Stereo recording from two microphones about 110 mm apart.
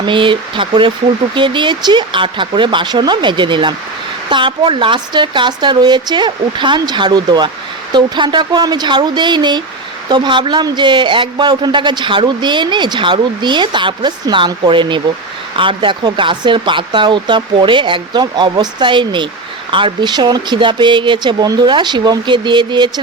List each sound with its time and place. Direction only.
0.0 s a man's voice: 50° right (ahead or behind)